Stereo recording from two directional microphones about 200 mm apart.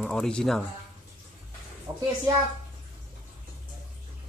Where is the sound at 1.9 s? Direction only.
20° right (ahead or behind).